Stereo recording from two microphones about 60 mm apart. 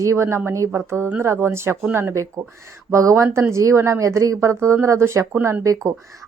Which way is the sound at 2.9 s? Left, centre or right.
Right.